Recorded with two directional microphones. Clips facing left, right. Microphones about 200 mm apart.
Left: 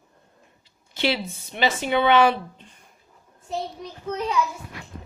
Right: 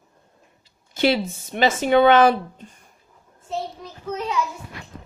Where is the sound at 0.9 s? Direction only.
45° right (ahead or behind).